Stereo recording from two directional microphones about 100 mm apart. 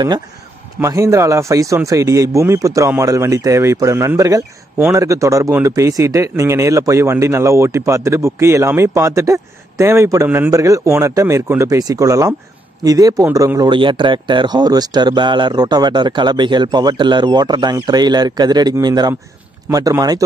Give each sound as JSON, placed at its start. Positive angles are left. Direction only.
{"t": 0.7, "sound": "speech", "side_deg": -30}
{"t": 10.5, "sound": "speech", "side_deg": -30}
{"t": 13.7, "sound": "speech", "side_deg": -55}